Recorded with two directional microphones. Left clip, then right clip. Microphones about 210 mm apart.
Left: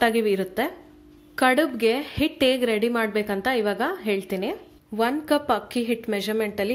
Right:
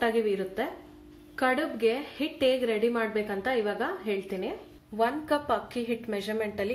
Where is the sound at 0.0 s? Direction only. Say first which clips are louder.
Left 5 dB; 50° left (ahead or behind).